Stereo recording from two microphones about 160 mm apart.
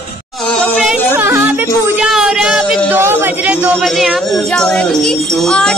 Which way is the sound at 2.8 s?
10° right (ahead or behind).